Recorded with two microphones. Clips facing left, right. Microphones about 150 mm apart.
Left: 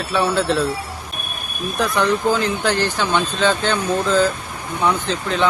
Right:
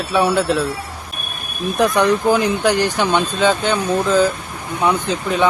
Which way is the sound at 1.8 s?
15° right (ahead or behind).